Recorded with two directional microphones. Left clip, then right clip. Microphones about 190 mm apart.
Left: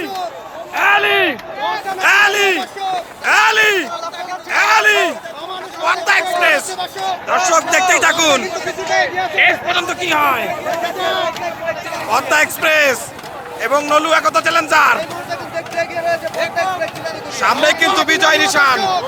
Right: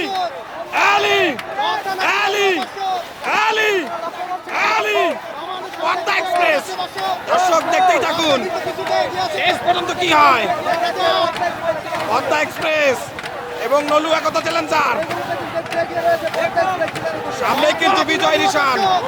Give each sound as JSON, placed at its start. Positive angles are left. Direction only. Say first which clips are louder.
{"t": 0.7, "sound": "a sound", "louder": "left 2 dB", "side_deg": -10}
{"t": 2.0, "sound": "a sound", "louder": "left 7 dB", "side_deg": 0}
{"t": 5.8, "sound": "a man's voice", "louder": "left 4 dB", "side_deg": 5}
{"t": 8.9, "sound": "speech", "louder": "left 3 dB", "side_deg": 45}
{"t": 9.4, "sound": "a man's voice", "louder": "left 4 dB", "side_deg": -15}
{"t": 10.1, "sound": "a man's voice", "louder": "right 4 dB", "side_deg": -5}
{"t": 10.9, "sound": "a sound", "louder": "right 2 dB", "side_deg": 50}
{"t": 12.1, "sound": "a man's voice", "louder": "left 5 dB", "side_deg": 5}
{"t": 17.7, "sound": "a man's voice", "louder": "left 2 dB", "side_deg": 0}
{"t": 18.8, "sound": "speech", "louder": "right 1 dB", "side_deg": 55}